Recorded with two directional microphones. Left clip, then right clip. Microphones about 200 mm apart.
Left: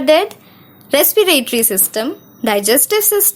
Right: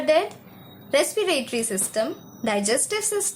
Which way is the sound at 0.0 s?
45° left (ahead or behind).